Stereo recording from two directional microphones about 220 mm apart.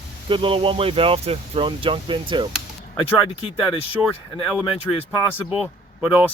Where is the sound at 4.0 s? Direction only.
5° right (ahead or behind).